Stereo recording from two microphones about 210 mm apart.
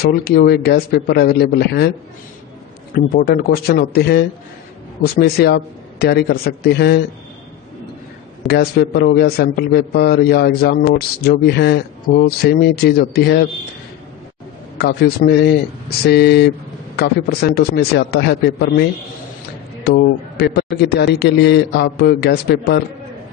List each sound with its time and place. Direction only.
0.0 s a man's voice: 45° left (ahead or behind)
2.9 s a man's voice: 45° left (ahead or behind)
8.5 s a man's voice: 50° left (ahead or behind)
14.8 s a man's voice: 50° left (ahead or behind)